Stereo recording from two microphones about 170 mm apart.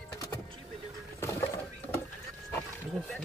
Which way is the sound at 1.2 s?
15° left (ahead or behind).